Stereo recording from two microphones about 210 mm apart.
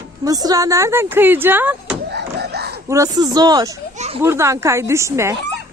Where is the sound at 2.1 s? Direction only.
50° right (ahead or behind).